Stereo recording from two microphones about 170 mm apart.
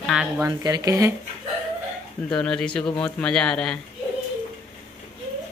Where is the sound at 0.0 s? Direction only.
Centre (ahead or behind).